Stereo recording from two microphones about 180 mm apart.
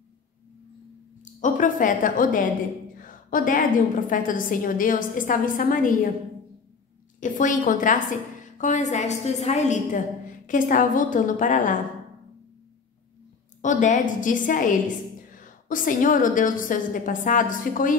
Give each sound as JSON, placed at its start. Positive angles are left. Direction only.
{"t": 1.2, "sound": "a woman's voice", "side_deg": 45}
{"t": 7.2, "sound": "a woman's voice", "side_deg": 45}
{"t": 13.6, "sound": "a woman's voice", "side_deg": 45}